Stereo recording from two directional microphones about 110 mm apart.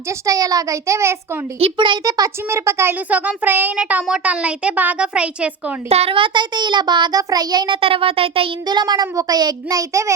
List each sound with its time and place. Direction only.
0.3 s child singing: 30° right (ahead or behind)
1.5 s a child's voice: 55° right (ahead or behind); by 2.9 s 25° right (ahead or behind)
3.1 s a child's voice: 15° right (ahead or behind)
5.9 s child singing: 60° right (ahead or behind); by 7.8 s 40° right (ahead or behind)
7.8 s speech: 55° right (ahead or behind)
8.6 s a child's voice: 40° right (ahead or behind)